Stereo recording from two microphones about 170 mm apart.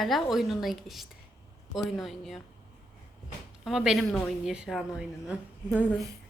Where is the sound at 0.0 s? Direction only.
Centre (ahead or behind).